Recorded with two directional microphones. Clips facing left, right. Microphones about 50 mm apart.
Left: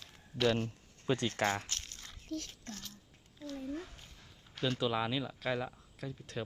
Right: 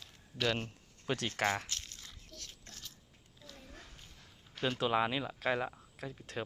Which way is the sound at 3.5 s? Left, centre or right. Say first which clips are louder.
Left 14 dB; centre.